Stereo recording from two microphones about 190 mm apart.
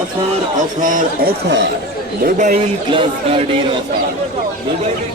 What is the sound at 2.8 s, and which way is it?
Speech, 30° right (ahead or behind).